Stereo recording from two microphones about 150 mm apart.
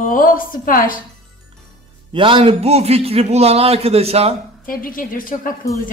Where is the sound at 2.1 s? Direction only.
35° right (ahead or behind).